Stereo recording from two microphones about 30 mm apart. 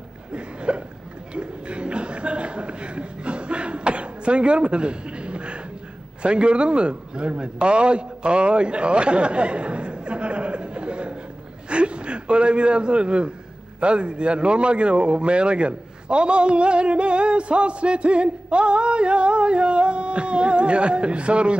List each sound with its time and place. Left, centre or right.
0.3 s hiccup: right
1.3 s a sound: right
6.2 s a man's voice: right